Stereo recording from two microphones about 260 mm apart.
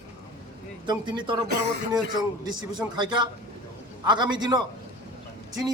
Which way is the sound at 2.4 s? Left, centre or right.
Centre.